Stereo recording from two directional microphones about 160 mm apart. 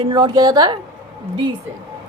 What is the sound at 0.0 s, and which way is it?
Speech, 30° right (ahead or behind).